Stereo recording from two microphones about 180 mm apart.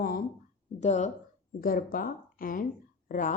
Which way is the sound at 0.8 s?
40° left (ahead or behind).